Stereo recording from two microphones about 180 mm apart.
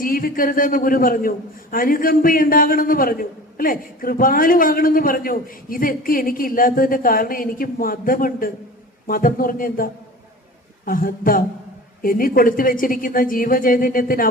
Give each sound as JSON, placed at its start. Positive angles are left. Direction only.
{"t": 0.0, "sound": "a man's voice", "side_deg": 50}